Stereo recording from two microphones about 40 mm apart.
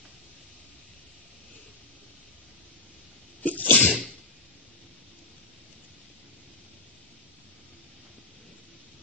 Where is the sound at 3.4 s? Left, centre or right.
Left.